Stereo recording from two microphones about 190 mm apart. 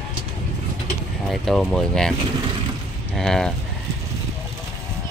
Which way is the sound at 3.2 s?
Centre (ahead or behind).